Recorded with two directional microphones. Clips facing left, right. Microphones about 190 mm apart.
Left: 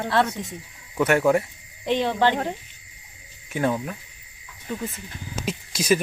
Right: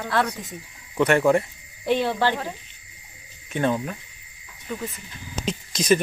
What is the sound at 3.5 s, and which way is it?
Speech, 5° left (ahead or behind).